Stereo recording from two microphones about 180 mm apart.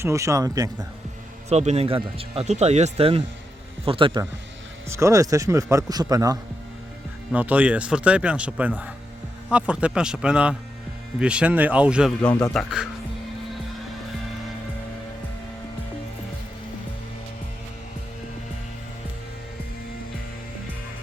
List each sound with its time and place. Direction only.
0.0 s a man's voice: 15° right (ahead or behind)
1.5 s speech: 35° right (ahead or behind)
4.9 s a man's voice: 15° right (ahead or behind)
7.3 s a man's voice: 10° right (ahead or behind)
12.2 s a man's voice: 15° left (ahead or behind)
12.5 s a man's voice: 5° right (ahead or behind)